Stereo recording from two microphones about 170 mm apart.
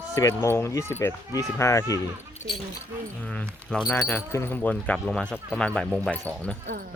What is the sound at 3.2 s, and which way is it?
Speech, 5° left (ahead or behind).